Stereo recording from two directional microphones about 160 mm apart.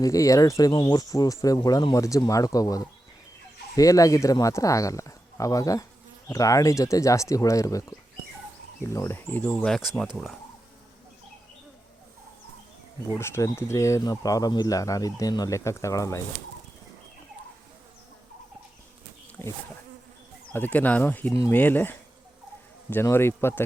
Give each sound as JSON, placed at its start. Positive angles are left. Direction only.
{"t": 0.0, "sound": "speech", "side_deg": 20}
{"t": 13.1, "sound": "speech", "side_deg": 15}
{"t": 19.4, "sound": "speech", "side_deg": 15}